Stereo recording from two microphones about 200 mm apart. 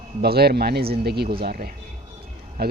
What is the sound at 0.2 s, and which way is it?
Speech, 50° right (ahead or behind).